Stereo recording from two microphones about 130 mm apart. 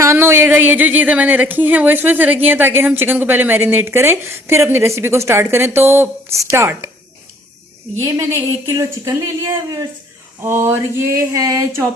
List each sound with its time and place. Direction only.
0.0 s speech: 20° right (ahead or behind)
8.0 s speech: 25° right (ahead or behind)